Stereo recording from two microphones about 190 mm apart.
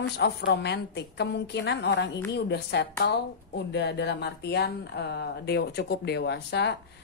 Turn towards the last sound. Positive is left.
turn(degrees=60)  # may be behind; listen again after turning